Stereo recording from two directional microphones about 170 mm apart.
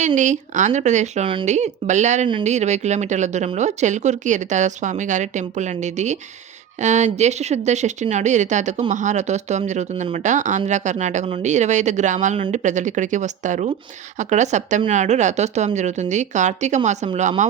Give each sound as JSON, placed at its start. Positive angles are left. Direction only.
{"t": 0.2, "sound": "speech", "side_deg": -45}